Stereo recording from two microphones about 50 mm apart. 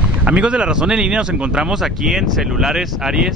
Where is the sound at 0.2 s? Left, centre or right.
Right.